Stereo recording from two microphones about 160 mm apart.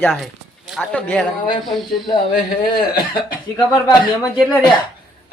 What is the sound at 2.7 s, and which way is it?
Speech, 30° left (ahead or behind).